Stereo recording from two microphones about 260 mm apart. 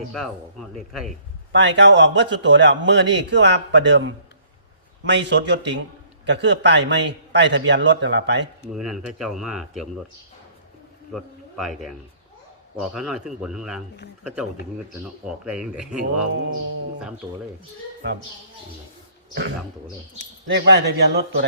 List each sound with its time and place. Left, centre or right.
0.1 s speech: centre
1.5 s a man's voice: right
8.7 s speech: centre
11.1 s a man's voice: centre
15.3 s speech: centre
19.3 s speech: right